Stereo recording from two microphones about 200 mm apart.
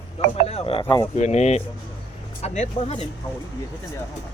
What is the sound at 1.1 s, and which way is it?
Speech, 35° left (ahead or behind).